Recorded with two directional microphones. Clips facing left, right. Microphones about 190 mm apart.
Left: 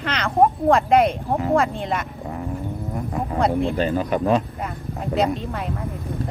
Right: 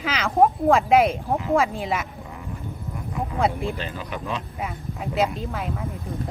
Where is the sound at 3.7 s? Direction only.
45° left (ahead or behind).